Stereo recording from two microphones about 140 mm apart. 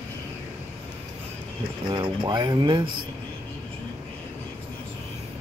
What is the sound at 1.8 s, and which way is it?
Speech, 35° right (ahead or behind).